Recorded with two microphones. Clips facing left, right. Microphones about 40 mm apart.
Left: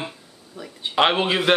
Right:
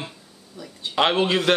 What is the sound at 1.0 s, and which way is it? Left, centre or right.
Speech, centre.